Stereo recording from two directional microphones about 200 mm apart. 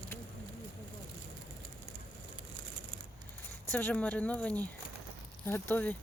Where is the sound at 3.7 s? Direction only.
10° left (ahead or behind).